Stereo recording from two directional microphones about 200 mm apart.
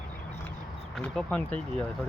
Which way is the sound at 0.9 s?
5° left (ahead or behind).